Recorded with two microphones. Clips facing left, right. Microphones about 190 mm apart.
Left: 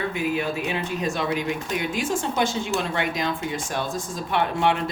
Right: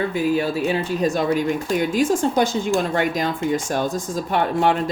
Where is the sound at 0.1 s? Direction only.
35° right (ahead or behind).